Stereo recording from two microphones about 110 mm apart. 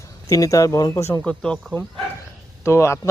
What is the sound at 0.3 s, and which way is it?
Speech, 30° left (ahead or behind).